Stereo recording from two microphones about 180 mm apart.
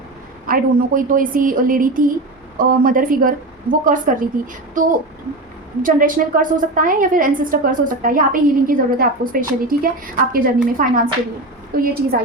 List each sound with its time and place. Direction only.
0.4 s a woman's voice: 50° right (ahead or behind)